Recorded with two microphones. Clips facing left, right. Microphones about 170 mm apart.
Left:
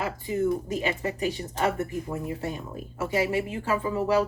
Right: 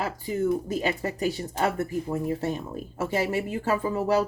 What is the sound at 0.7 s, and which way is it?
Speech, 40° right (ahead or behind).